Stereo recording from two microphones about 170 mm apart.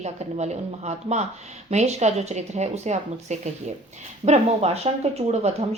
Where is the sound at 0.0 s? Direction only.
40° right (ahead or behind).